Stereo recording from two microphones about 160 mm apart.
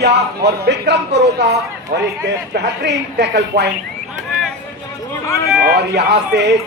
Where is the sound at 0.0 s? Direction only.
90° right.